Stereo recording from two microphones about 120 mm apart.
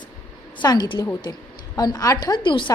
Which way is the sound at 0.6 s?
35° left (ahead or behind).